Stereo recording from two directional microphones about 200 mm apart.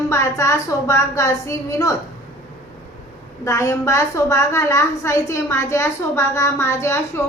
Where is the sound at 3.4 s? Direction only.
15° left (ahead or behind).